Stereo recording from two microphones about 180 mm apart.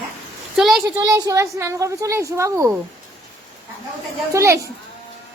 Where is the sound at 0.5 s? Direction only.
Centre (ahead or behind).